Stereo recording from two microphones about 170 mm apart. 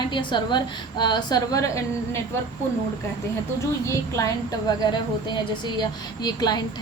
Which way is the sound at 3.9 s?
20° left (ahead or behind).